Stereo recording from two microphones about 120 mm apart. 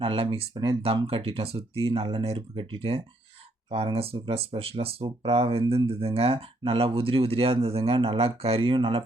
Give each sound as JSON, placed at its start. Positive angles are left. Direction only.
{"t": 0.0, "sound": "speech", "side_deg": -50}
{"t": 1.0, "sound": "speech", "side_deg": -55}